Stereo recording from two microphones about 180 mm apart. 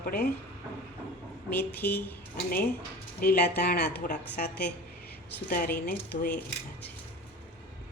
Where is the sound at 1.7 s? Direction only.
10° left (ahead or behind).